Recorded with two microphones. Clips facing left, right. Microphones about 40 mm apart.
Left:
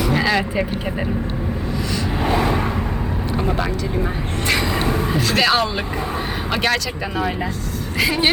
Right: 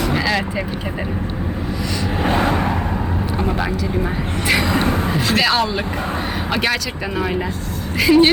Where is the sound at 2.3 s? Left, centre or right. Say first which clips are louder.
Right 1 dB; right.